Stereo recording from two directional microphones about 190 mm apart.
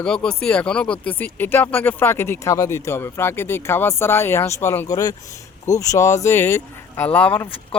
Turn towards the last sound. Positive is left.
turn(degrees=10)  # may be behind; listen again after turning